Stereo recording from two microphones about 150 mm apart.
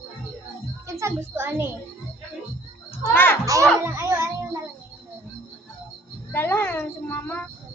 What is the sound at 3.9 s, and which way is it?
Music, 15° right (ahead or behind).